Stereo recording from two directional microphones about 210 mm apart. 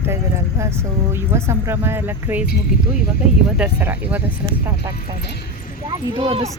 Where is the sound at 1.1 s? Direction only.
10° right (ahead or behind).